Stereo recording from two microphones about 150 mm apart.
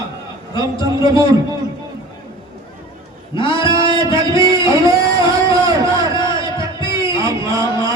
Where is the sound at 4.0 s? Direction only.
20° right (ahead or behind).